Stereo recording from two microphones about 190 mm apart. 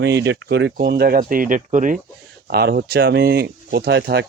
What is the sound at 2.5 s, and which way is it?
Speech, 55° right (ahead or behind).